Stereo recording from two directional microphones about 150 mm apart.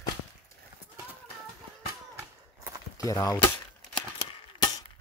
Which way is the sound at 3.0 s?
20° left (ahead or behind).